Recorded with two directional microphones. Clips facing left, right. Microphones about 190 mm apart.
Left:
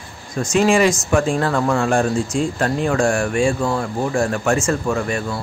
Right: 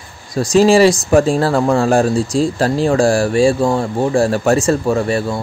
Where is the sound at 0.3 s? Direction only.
35° right (ahead or behind).